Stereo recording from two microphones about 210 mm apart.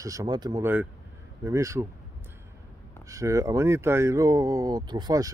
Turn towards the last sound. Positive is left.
turn(degrees=-20)  # may be behind; listen again after turning